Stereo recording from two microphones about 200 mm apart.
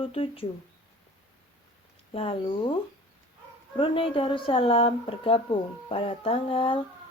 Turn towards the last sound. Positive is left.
turn(degrees=25)  # may be behind; listen again after turning